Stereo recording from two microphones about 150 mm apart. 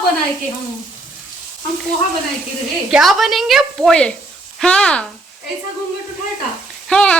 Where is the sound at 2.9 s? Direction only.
Centre (ahead or behind).